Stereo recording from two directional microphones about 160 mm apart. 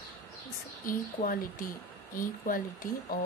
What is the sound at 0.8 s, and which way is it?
Speech, 60° left (ahead or behind).